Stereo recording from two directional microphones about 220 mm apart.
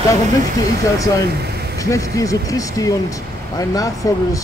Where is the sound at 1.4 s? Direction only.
45° right (ahead or behind).